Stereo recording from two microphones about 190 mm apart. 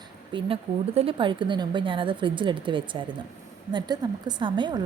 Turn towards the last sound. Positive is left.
turn(degrees=-25)  # may be behind; listen again after turning